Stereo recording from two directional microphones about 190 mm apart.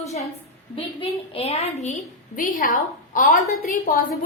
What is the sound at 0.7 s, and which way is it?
A woman's voice, 30° left (ahead or behind).